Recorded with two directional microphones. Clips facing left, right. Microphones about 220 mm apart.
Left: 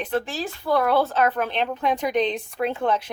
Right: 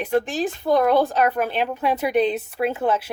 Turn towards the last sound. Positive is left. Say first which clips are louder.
# right 2 dB
turn(degrees=-5)  # may be behind; listen again after turning